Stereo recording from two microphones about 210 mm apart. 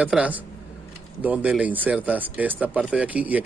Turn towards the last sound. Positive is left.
turn(degrees=-5)  # may be behind; listen again after turning